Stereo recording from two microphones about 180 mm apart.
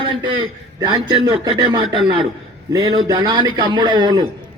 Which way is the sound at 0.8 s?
25° right (ahead or behind).